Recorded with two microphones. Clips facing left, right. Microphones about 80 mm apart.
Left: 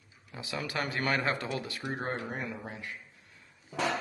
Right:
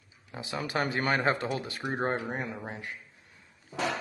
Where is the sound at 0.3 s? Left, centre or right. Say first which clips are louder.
Right 3 dB; right.